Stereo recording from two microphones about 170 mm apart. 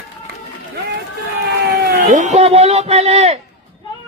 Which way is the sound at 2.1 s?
45° right (ahead or behind).